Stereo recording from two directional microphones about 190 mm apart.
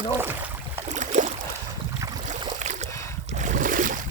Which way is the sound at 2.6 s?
40° right (ahead or behind).